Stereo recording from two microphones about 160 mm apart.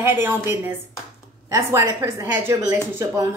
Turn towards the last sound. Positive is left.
turn(degrees=-15)  # may be behind; listen again after turning